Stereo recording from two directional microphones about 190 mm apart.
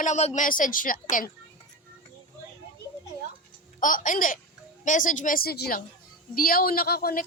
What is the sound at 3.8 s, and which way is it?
Speech, 45° left (ahead or behind).